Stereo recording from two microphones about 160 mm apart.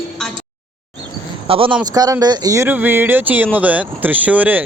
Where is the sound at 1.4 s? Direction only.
35° right (ahead or behind).